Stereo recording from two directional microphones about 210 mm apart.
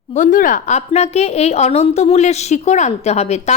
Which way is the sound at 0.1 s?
35° left (ahead or behind).